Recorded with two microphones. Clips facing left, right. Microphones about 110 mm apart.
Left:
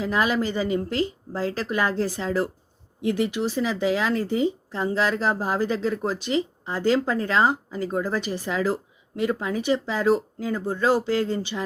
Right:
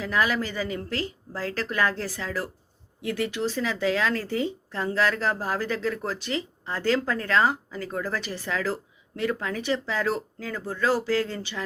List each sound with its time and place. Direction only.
0.0 s speech: 20° left (ahead or behind)